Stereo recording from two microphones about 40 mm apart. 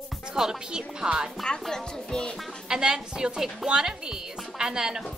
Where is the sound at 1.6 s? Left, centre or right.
Centre.